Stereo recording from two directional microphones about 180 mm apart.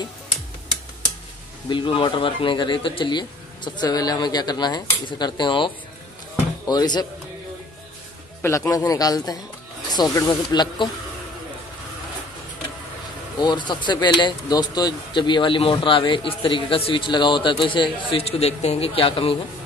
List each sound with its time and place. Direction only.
1.7 s speech: 25° left (ahead or behind)
6.7 s speech: 20° left (ahead or behind)
8.4 s speech: 15° left (ahead or behind)
13.4 s speech: 25° left (ahead or behind)